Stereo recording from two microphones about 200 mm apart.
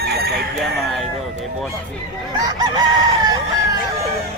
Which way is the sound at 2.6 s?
20° right (ahead or behind).